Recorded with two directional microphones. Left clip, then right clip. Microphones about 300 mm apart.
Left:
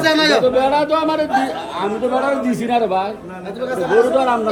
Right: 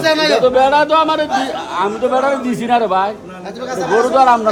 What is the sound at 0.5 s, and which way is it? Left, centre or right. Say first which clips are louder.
A man's voice: right 4 dB; centre.